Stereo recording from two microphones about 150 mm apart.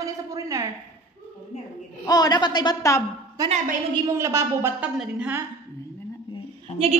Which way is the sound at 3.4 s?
25° right (ahead or behind).